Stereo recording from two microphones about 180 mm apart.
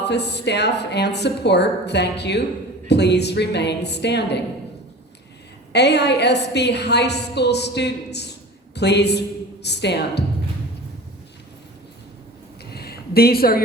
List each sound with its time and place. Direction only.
0.0 s a woman's voice: 70° left (ahead or behind)
5.7 s a woman's voice: 70° left (ahead or behind)
12.7 s a sound: 60° left (ahead or behind)